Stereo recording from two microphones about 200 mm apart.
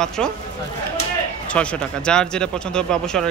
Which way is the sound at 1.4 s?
5° left (ahead or behind).